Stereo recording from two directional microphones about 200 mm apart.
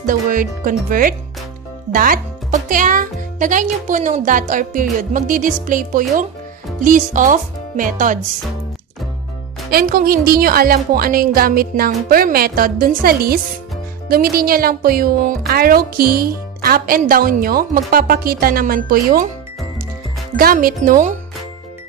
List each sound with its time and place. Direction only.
0.0 s a child's voice: 40° right (ahead or behind)
9.7 s speech: 45° right (ahead or behind)
20.3 s speech: 45° right (ahead or behind)